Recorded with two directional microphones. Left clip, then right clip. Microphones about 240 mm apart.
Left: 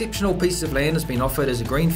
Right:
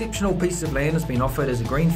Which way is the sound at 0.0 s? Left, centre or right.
Left.